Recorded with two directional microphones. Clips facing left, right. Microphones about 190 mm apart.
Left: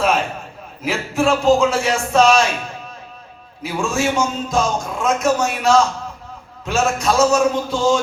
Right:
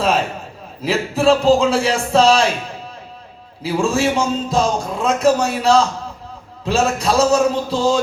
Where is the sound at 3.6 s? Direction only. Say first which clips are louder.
Right 3 dB; 35° right (ahead or behind).